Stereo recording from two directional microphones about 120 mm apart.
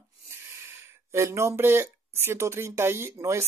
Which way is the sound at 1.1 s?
25° right (ahead or behind).